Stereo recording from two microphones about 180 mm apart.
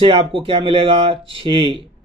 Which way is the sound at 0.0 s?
30° right (ahead or behind).